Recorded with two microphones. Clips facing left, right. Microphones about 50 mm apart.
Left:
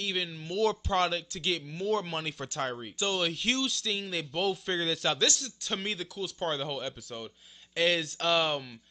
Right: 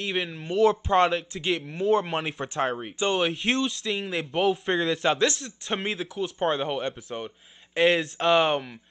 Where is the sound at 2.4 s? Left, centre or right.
Right.